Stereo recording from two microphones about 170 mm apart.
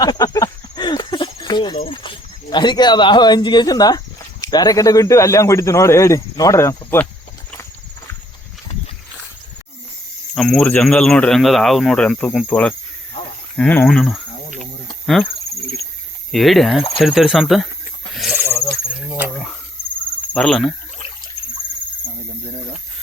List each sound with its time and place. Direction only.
0.0 s cricket: 20° left (ahead or behind)
1.7 s speech: 35° left (ahead or behind); by 7.1 s 15° left (ahead or behind)
10.3 s speech: centre (ahead or behind)
14.6 s cricket: centre (ahead or behind)
16.3 s speech: centre (ahead or behind)
18.3 s snake: 15° right (ahead or behind)
20.3 s speech: 5° left (ahead or behind)